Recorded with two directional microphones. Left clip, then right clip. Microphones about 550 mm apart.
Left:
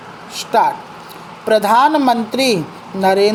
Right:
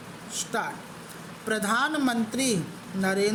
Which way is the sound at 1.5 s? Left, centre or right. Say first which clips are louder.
Left 15 dB; right.